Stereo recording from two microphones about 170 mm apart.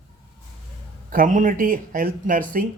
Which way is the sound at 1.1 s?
50° right (ahead or behind).